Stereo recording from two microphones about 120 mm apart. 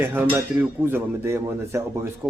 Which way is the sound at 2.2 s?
5° right (ahead or behind).